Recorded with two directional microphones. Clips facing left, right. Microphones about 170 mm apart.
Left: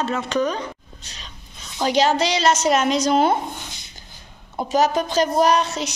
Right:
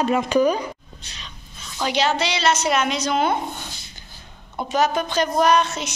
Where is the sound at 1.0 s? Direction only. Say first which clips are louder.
Even; 40° left (ahead or behind).